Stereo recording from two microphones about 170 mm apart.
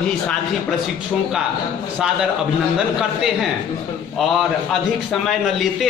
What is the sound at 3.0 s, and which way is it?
A man's voice, 5° right (ahead or behind).